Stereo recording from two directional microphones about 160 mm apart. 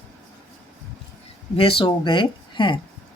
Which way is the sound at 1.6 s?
35° left (ahead or behind).